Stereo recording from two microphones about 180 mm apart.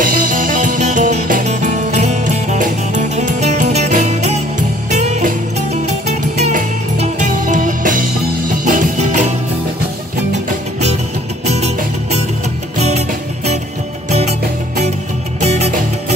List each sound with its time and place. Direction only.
0.0 s music: 50° right (ahead or behind)
11.4 s music: 40° right (ahead or behind)
15.4 s music: 40° right (ahead or behind)